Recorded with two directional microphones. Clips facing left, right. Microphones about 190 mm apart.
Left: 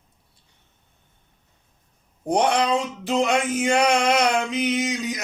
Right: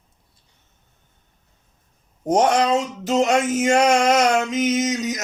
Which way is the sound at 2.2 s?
45° right (ahead or behind).